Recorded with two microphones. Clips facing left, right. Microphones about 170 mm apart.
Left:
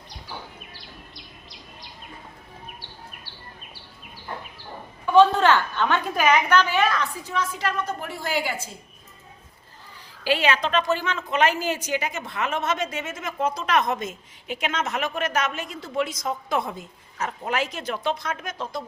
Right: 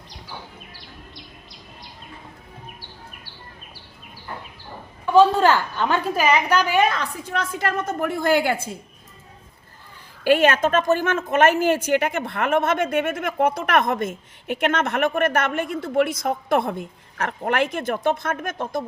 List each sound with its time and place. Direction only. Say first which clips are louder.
5.5 s a woman's voice: right 1 dB; 10° right (ahead or behind)
7.3 s a woman's voice: right 2 dB; 50° right (ahead or behind)
10.2 s a woman's voice: right 6 dB; 50° right (ahead or behind)